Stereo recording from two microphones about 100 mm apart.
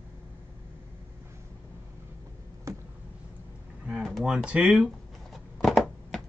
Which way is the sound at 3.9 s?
Centre (ahead or behind).